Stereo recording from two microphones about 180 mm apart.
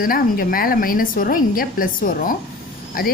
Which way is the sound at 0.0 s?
55° left (ahead or behind).